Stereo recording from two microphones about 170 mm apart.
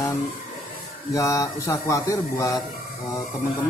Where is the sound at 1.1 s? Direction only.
20° left (ahead or behind).